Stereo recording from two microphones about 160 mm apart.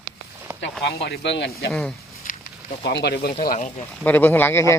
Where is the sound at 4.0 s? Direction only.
10° left (ahead or behind).